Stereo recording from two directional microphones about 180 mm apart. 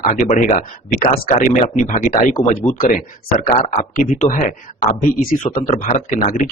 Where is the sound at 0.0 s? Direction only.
40° left (ahead or behind).